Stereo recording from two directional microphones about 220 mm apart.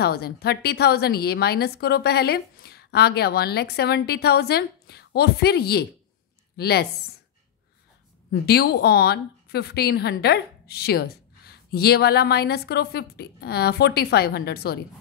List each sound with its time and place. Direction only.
0.0 s a woman's voice: 45° left (ahead or behind)
8.3 s a woman's voice: 45° left (ahead or behind)